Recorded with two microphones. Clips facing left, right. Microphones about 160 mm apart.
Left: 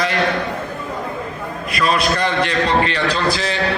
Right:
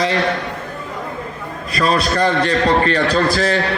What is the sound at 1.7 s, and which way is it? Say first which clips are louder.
A man's voice: right 2 dB; 35° right (ahead or behind).